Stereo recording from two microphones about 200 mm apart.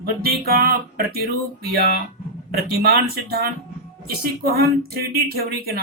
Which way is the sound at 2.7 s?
50° right (ahead or behind).